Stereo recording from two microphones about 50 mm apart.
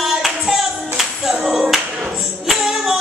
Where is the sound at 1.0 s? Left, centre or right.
Centre.